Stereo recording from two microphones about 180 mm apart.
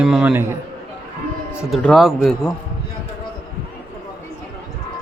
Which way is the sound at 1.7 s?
Centre (ahead or behind).